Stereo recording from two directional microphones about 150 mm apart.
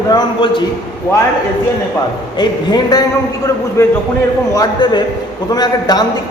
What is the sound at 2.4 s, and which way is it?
A man's voice, 30° left (ahead or behind).